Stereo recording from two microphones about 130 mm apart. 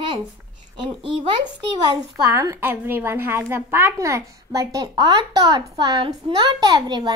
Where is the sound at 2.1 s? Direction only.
25° right (ahead or behind).